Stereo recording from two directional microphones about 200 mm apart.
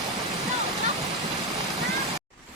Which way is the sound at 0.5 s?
35° right (ahead or behind).